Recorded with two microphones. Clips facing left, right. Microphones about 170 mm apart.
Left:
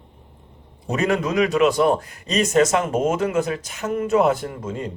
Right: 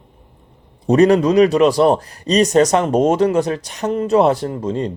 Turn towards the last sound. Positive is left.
turn(degrees=-35)  # may be behind; listen again after turning